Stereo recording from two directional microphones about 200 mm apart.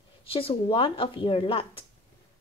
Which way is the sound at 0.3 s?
25° left (ahead or behind).